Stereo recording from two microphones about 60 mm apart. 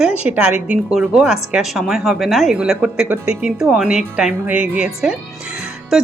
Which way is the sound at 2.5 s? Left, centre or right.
Centre.